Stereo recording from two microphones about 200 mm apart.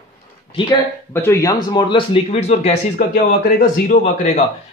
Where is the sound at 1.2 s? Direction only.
15° left (ahead or behind).